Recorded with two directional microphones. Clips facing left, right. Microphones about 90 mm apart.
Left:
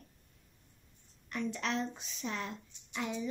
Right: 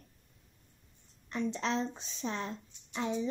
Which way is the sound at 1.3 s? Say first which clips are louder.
Right 3 dB; 30° right (ahead or behind).